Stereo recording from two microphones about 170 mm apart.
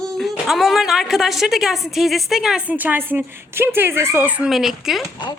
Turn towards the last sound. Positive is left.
turn(degrees=0)  # may be behind; listen again after turning